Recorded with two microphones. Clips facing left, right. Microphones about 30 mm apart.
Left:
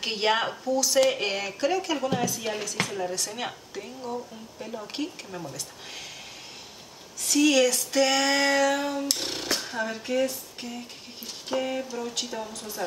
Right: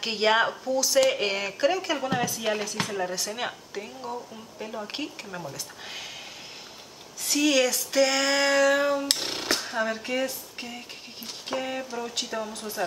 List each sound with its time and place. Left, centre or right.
0.0 s speech: centre
7.2 s a sound: centre
9.2 s speech: centre
11.4 s speech: centre